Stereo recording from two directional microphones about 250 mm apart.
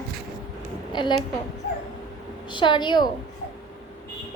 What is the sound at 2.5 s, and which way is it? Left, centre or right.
Speech, centre.